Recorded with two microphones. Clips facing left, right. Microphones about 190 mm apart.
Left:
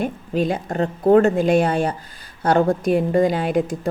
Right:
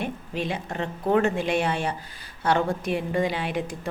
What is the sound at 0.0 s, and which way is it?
A woman's voice, 40° left (ahead or behind).